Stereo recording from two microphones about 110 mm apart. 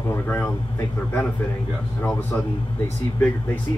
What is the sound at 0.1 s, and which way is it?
A man's voice, 20° left (ahead or behind).